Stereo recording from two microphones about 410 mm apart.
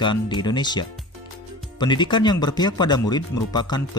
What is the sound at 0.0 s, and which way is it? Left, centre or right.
Speech, centre.